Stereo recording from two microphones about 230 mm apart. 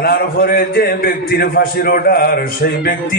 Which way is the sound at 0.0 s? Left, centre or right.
Left.